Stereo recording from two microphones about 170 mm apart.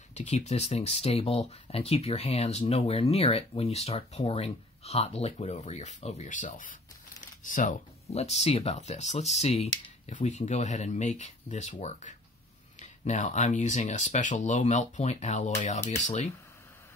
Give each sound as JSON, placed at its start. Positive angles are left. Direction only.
{"t": 0.1, "sound": "speech", "side_deg": 40}